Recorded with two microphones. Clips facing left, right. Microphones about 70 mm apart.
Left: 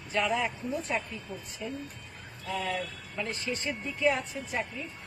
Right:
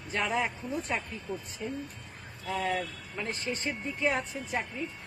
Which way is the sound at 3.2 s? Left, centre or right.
Right.